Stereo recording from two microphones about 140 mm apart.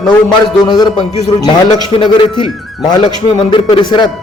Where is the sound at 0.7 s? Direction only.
30° left (ahead or behind).